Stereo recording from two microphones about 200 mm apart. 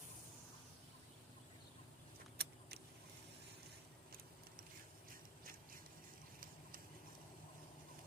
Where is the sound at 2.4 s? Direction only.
55° right (ahead or behind).